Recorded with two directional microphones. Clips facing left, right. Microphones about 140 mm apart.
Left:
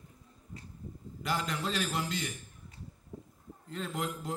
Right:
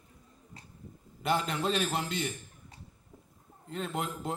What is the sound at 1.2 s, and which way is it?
Speech, 25° right (ahead or behind).